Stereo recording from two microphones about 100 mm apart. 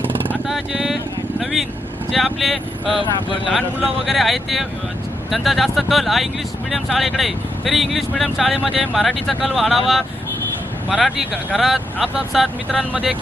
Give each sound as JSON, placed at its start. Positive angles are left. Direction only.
{"t": 0.4, "sound": "speech", "side_deg": -5}
{"t": 1.4, "sound": "vehicle", "side_deg": 0}
{"t": 2.1, "sound": "speech", "side_deg": 0}
{"t": 3.0, "sound": "speech", "side_deg": 55}
{"t": 4.0, "sound": "speech", "side_deg": 0}